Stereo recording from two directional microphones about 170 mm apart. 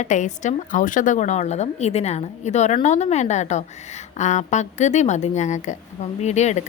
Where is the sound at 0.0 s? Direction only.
45° left (ahead or behind).